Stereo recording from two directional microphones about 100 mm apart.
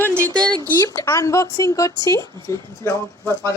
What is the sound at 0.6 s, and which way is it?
Speech, 25° left (ahead or behind).